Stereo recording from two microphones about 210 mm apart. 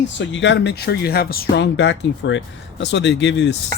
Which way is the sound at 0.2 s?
60° left (ahead or behind).